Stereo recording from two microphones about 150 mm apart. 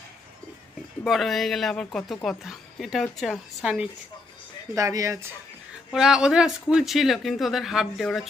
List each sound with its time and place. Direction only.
1.0 s speech: centre (ahead or behind)
4.7 s speech: 20° right (ahead or behind)
5.9 s speech: 5° right (ahead or behind)